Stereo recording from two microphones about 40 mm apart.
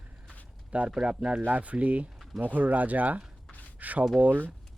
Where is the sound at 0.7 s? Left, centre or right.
Right.